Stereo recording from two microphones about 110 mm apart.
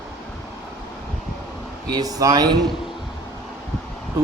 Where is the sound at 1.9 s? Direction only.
35° right (ahead or behind).